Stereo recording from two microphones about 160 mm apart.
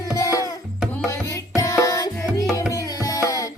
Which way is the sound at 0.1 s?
20° left (ahead or behind).